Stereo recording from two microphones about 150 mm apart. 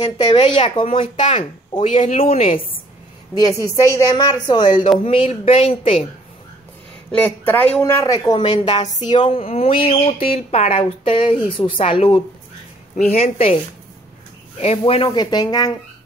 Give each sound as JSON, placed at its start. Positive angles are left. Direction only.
{"t": 0.0, "sound": "speech", "side_deg": 30}
{"t": 3.4, "sound": "speech", "side_deg": 20}
{"t": 7.1, "sound": "speech", "side_deg": 10}
{"t": 14.6, "sound": "speech", "side_deg": 40}
{"t": 15.0, "sound": "speech", "side_deg": 30}